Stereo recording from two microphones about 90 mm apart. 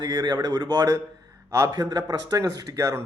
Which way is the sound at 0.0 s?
50° right (ahead or behind).